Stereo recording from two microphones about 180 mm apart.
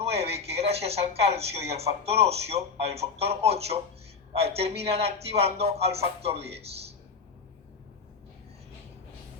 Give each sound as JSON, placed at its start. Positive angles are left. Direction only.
{"t": 0.0, "sound": "speech", "side_deg": -35}